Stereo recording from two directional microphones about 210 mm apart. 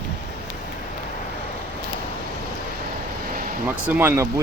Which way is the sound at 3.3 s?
45° right (ahead or behind).